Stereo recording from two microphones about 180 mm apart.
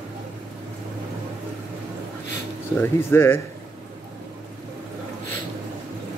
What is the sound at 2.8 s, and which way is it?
Speech, 15° left (ahead or behind).